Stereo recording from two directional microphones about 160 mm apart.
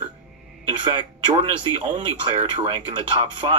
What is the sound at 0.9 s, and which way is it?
Speech, 25° right (ahead or behind).